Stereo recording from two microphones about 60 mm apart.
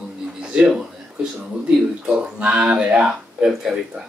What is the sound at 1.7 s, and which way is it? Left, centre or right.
Speech, right.